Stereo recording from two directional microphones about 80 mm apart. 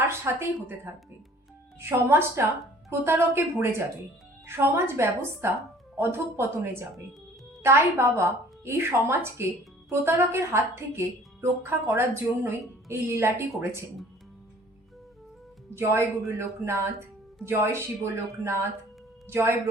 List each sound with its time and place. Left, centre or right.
0.3 s a woman's voice: right
15.7 s a woman's voice: right